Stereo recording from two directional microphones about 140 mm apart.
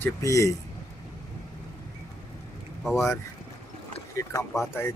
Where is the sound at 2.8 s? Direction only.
Centre (ahead or behind).